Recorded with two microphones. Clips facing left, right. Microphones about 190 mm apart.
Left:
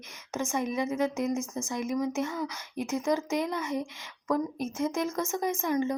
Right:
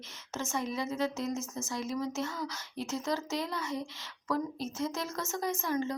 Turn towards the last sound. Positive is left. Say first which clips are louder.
# left 4 dB
turn(degrees=15)  # may be behind; listen again after turning